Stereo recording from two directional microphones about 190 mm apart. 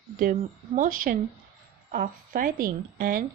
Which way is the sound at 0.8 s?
45° right (ahead or behind).